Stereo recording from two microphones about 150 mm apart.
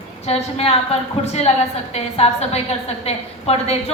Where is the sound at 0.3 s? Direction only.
45° left (ahead or behind).